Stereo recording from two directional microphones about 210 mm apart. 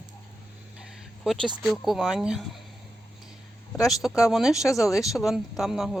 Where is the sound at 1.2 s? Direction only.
Centre (ahead or behind).